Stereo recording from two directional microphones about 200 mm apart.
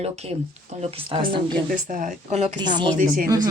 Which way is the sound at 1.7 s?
40° right (ahead or behind).